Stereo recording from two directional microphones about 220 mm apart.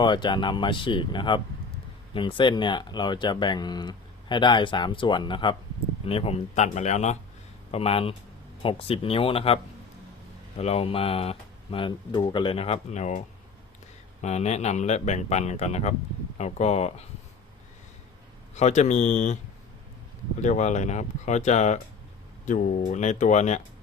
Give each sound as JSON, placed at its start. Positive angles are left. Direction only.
{"t": 0.0, "sound": "speech", "side_deg": 20}
{"t": 10.6, "sound": "speech", "side_deg": 25}
{"t": 18.5, "sound": "speech", "side_deg": 30}
{"t": 20.4, "sound": "speech", "side_deg": 30}